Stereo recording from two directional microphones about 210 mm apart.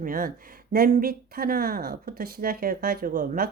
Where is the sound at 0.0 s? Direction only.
40° right (ahead or behind).